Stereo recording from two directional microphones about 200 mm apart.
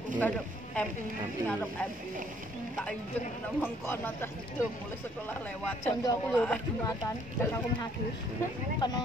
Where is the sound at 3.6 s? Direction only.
10° left (ahead or behind).